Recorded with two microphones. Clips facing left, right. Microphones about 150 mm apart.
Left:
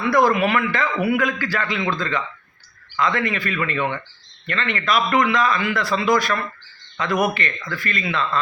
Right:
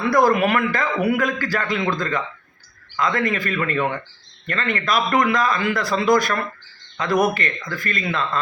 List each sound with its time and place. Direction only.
0.1 s a man's voice: 40° right (ahead or behind)